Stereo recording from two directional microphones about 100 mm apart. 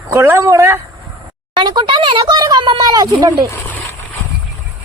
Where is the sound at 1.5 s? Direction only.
45° right (ahead or behind).